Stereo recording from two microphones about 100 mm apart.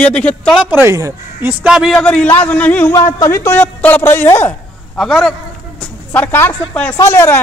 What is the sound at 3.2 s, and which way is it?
Speech, 25° left (ahead or behind).